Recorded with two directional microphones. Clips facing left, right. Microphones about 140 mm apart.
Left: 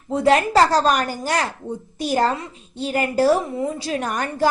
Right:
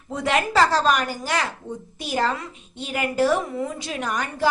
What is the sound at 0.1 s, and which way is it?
A woman's voice, 35° left (ahead or behind).